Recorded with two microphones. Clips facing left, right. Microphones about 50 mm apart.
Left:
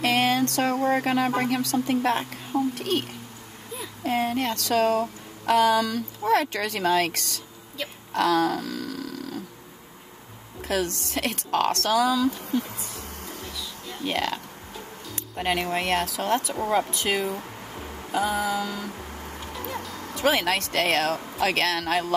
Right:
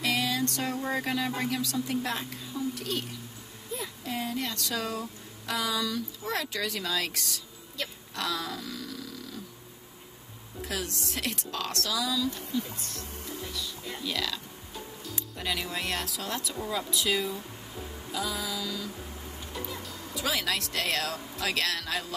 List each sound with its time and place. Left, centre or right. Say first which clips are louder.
0.0 s speech: left 7 dB; left
8.1 s a sound: left 13 dB; left
10.7 s speech: left 9 dB; left
14.0 s speech: left 7 dB; left
19.2 s a sound: left 3 dB; left
19.8 s speech: left 13 dB; left